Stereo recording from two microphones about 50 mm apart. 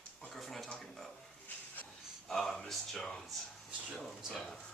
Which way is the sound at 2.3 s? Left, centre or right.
Centre.